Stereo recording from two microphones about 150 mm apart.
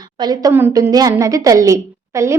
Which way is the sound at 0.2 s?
25° right (ahead or behind).